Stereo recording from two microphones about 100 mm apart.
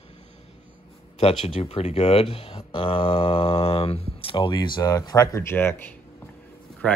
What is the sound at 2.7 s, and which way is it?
Speech, 60° left (ahead or behind).